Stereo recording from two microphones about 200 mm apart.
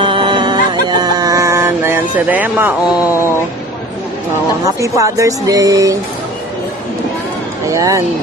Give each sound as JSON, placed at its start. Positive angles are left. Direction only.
{"t": 0.0, "sound": "music", "side_deg": -25}
{"t": 4.7, "sound": "speech", "side_deg": -15}
{"t": 7.7, "sound": "speech", "side_deg": -15}